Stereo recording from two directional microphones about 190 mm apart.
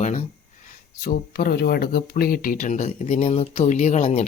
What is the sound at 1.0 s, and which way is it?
Speech, 55° left (ahead or behind).